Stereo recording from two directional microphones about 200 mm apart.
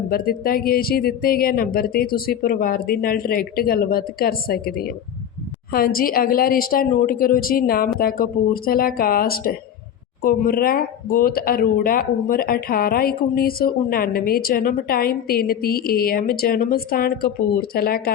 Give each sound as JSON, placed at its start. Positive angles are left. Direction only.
{"t": 0.1, "sound": "speech", "side_deg": 45}